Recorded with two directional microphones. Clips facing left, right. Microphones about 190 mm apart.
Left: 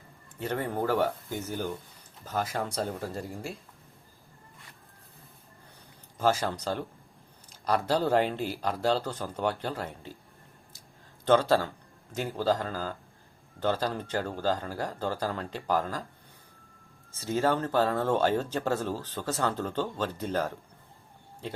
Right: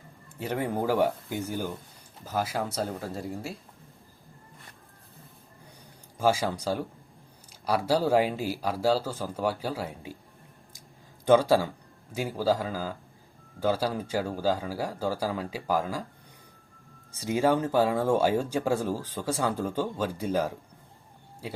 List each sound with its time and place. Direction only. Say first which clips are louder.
0.3 s speech: right 1 dB; 10° right (ahead or behind)
6.1 s speech: right 1 dB; 10° right (ahead or behind)
11.3 s speech: right 2 dB; 10° right (ahead or behind)
17.1 s speech: right 2 dB; 15° right (ahead or behind)